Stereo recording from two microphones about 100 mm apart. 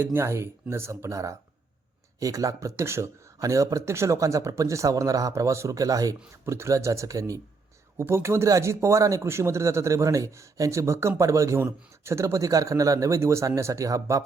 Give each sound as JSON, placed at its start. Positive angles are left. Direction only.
{"t": 0.0, "sound": "speech", "side_deg": -25}